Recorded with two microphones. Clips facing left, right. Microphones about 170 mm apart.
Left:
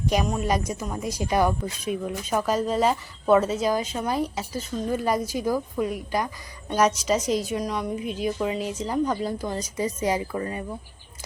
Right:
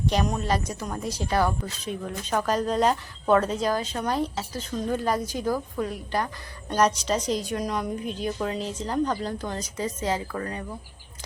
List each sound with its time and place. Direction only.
0.0 s a woman's voice: 5° left (ahead or behind)